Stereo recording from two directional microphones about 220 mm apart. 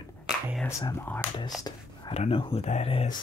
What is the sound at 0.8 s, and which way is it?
Speech, 15° left (ahead or behind).